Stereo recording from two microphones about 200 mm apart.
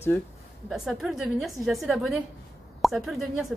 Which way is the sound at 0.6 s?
Centre (ahead or behind).